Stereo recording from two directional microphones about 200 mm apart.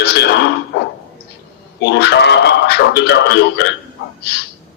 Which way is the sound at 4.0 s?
55° left (ahead or behind).